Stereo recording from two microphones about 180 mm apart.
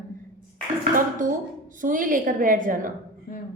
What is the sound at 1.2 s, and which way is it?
A woman's voice, 45° right (ahead or behind).